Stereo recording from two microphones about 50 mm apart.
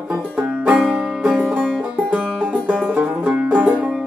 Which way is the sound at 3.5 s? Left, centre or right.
Right.